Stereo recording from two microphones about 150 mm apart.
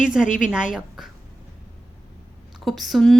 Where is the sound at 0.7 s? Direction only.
Centre (ahead or behind).